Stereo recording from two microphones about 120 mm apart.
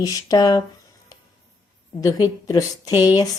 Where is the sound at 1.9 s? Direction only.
30° left (ahead or behind).